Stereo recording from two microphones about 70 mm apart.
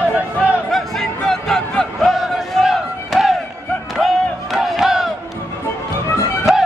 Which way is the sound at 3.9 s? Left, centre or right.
Centre.